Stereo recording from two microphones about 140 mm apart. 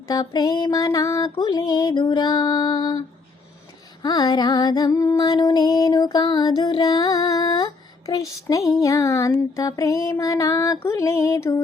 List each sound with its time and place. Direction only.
0.1 s music: 30° left (ahead or behind)
4.0 s music: 30° left (ahead or behind)